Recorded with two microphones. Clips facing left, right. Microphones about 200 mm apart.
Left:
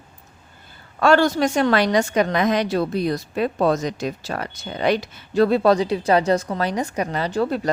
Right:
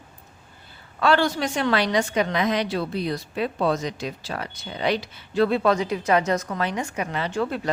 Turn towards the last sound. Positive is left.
turn(degrees=35)  # may be behind; listen again after turning